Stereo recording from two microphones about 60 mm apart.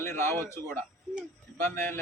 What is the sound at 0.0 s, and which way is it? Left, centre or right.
Speech, left.